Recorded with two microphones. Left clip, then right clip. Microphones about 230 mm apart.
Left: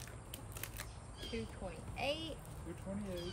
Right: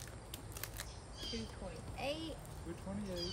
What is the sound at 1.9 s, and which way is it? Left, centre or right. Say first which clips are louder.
Speech: left 2 dB; centre.